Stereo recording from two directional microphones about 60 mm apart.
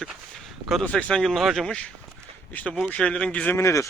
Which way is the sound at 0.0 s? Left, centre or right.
Centre.